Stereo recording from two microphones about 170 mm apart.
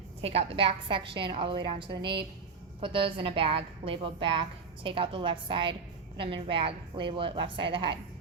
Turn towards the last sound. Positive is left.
turn(degrees=-30)  # may be behind; listen again after turning